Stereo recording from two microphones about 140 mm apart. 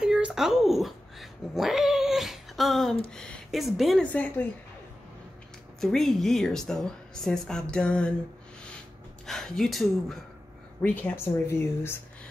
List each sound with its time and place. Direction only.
0.0 s cat: 5° right (ahead or behind)
3.1 s a woman's voice: 5° left (ahead or behind)
4.0 s speech: 10° left (ahead or behind)
5.8 s a woman's voice: centre (ahead or behind)
9.2 s a woman's voice: centre (ahead or behind)
10.8 s speech: 10° left (ahead or behind)